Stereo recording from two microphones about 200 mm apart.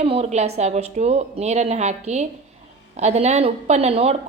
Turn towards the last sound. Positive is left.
turn(degrees=-30)  # may be behind; listen again after turning